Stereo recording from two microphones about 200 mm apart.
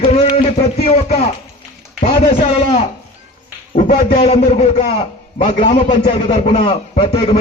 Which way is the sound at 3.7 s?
35° left (ahead or behind).